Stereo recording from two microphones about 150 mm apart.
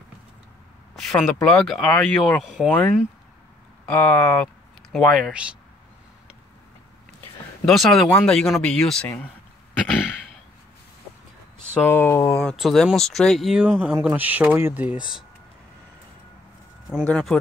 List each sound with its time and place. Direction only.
0.9 s speech: centre (ahead or behind)
3.8 s speech: 10° left (ahead or behind)
4.9 s speech: centre (ahead or behind)
7.6 s speech: centre (ahead or behind)
11.7 s speech: 15° left (ahead or behind)
12.4 s speech: centre (ahead or behind)
17.0 s speech: 5° left (ahead or behind)